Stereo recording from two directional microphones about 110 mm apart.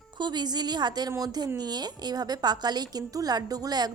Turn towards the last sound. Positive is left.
turn(degrees=-35)  # may be behind; listen again after turning